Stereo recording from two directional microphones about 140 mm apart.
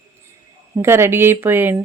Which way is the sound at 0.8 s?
20° right (ahead or behind).